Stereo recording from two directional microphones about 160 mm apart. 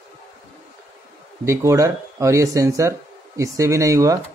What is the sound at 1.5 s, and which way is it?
Speech, 15° right (ahead or behind).